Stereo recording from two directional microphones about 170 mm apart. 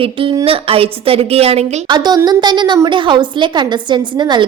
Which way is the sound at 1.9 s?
25° right (ahead or behind).